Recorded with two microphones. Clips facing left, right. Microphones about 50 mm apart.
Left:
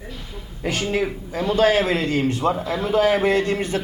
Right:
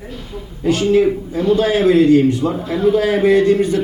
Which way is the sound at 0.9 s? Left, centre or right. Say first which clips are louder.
Right 9 dB; left.